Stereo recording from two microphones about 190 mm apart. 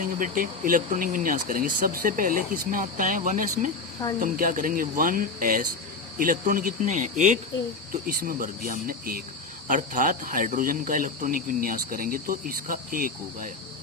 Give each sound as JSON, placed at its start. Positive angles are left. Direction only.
{"t": 0.0, "sound": "cricket", "side_deg": -45}
{"t": 6.1, "sound": "speech", "side_deg": -45}
{"t": 8.0, "sound": "cricket", "side_deg": -50}